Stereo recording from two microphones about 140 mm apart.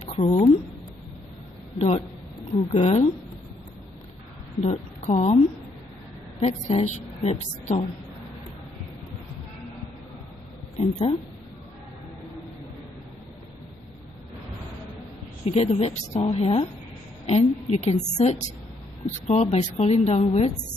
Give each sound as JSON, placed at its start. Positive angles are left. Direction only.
{"t": 0.0, "sound": "a sound", "side_deg": 50}
{"t": 1.8, "sound": "a woman's voice", "side_deg": 50}
{"t": 4.6, "sound": "a woman's voice", "side_deg": 50}
{"t": 10.8, "sound": "speech", "side_deg": 40}
{"t": 15.4, "sound": "a woman's voice", "side_deg": 45}